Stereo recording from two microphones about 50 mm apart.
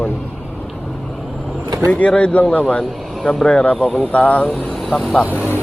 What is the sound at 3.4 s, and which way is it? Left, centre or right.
Speech, left.